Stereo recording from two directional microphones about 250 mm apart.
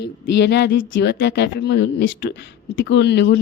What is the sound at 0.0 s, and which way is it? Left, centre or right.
Speech, left.